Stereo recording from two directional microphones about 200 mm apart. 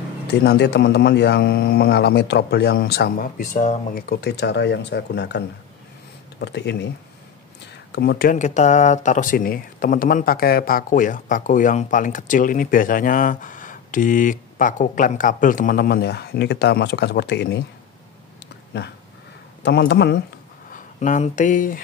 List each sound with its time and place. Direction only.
0.3 s a man's voice: 55° left (ahead or behind); by 3.8 s 40° left (ahead or behind)
3.9 s a man's voice: 55° left (ahead or behind)
6.4 s a man's voice: 60° left (ahead or behind)
7.9 s speech: 50° left (ahead or behind)
19.6 s a man's voice: 60° left (ahead or behind)
20.7 s speech: 40° left (ahead or behind)